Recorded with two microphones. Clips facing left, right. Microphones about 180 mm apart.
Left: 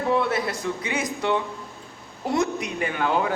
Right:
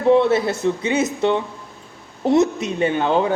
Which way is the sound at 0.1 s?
25° right (ahead or behind).